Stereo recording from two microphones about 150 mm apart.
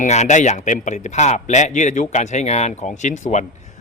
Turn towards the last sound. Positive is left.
turn(degrees=55)  # may be behind; listen again after turning